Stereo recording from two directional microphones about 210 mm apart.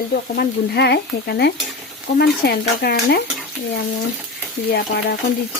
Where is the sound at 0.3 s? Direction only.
50° left (ahead or behind).